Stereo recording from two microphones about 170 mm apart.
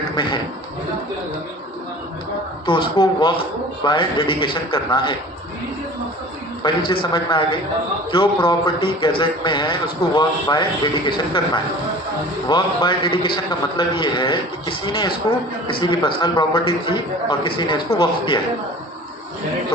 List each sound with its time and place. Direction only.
2.6 s a man's voice: 30° left (ahead or behind)
6.6 s a man's voice: 30° left (ahead or behind)